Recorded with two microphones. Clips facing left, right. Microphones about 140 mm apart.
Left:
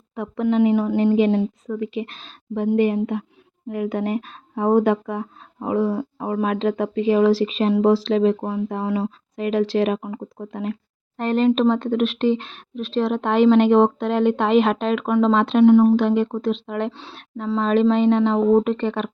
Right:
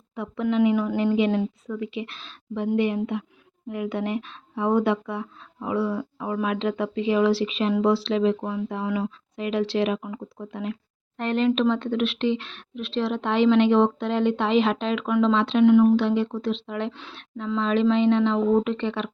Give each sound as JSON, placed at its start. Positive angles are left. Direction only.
{"t": 0.2, "sound": "a woman's voice", "side_deg": 45}
{"t": 15.6, "sound": "a woman's voice", "side_deg": 35}
{"t": 16.0, "sound": "speech", "side_deg": 45}